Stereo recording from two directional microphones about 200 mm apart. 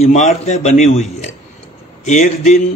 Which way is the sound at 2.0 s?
35° left (ahead or behind).